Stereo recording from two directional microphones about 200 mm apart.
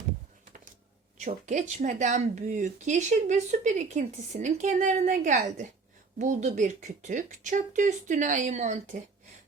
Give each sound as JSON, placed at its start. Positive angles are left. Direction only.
{"t": 1.2, "sound": "speech", "side_deg": -35}